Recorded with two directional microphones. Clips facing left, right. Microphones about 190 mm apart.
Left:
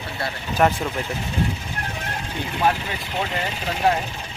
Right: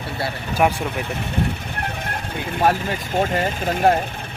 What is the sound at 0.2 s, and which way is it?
Speech, 10° right (ahead or behind).